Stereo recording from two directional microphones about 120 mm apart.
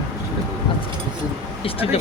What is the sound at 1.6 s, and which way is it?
Speech, 50° left (ahead or behind).